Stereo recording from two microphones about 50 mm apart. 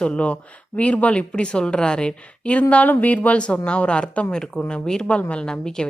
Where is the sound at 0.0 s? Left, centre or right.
Left.